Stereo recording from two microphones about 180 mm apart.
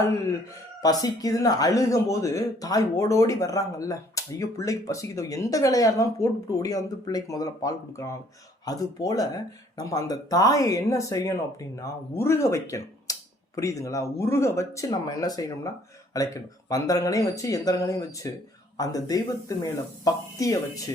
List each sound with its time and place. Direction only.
0.8 s speech: 20° left (ahead or behind)